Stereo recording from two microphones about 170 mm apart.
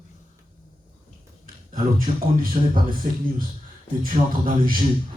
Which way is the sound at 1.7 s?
55° right (ahead or behind).